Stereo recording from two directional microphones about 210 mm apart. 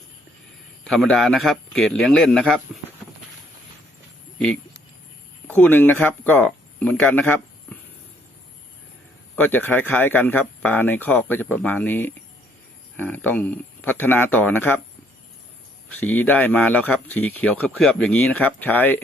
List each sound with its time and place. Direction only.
0.9 s a man's voice: centre (ahead or behind)
5.5 s speech: 10° left (ahead or behind)
9.3 s a man's voice: 10° left (ahead or behind)
15.9 s a man's voice: 10° left (ahead or behind)